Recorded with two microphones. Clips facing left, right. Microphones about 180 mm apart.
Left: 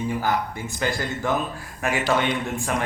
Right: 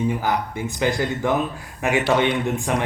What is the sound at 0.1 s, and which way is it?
Speech, 15° right (ahead or behind).